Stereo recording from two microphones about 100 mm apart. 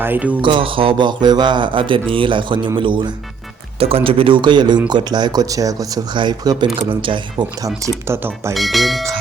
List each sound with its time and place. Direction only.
0.0 s speech: 15° right (ahead or behind)
0.4 s speech: 60° right (ahead or behind)
3.8 s speech: 75° right (ahead or behind); by 6.7 s 45° right (ahead or behind)
7.0 s speech: 55° right (ahead or behind)
7.9 s speech: 25° right (ahead or behind)
8.5 s speech: centre (ahead or behind)